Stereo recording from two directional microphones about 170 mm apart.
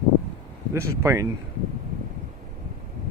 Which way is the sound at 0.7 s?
15° right (ahead or behind).